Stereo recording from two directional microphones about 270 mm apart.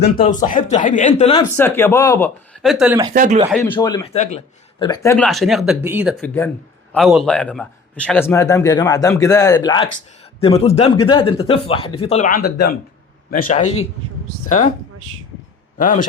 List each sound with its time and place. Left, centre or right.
0.0 s speech: left
1.5 s a man's voice: centre
3.1 s speech: right
3.5 s a man's voice: centre
5.1 s a man's voice: centre; by 13.8 s left
15.8 s speech: left